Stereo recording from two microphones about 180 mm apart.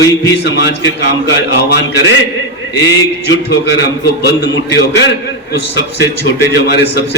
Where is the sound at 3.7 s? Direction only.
70° left (ahead or behind).